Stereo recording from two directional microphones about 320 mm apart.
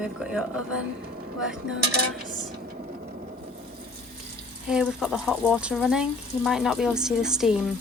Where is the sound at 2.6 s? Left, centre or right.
Right.